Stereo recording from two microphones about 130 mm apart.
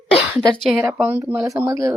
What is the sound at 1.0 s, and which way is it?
Speech, 10° right (ahead or behind).